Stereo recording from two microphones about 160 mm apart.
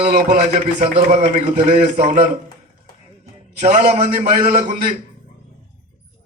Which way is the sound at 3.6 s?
50° right (ahead or behind).